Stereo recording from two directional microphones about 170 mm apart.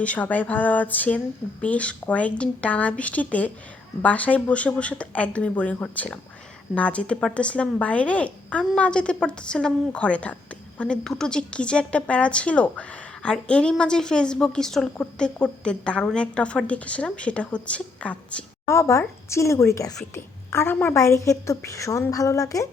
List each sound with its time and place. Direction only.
0.0 s a woman's voice: 10° left (ahead or behind)